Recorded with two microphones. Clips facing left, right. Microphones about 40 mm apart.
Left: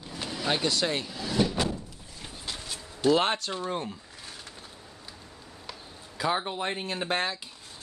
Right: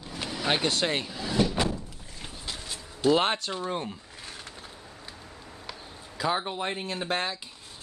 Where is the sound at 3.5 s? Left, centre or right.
Centre.